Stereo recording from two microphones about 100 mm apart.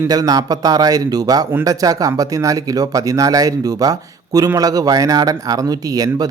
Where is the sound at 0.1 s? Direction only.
40° right (ahead or behind).